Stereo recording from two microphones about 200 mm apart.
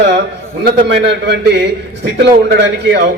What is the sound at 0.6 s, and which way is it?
A man's voice, 55° right (ahead or behind).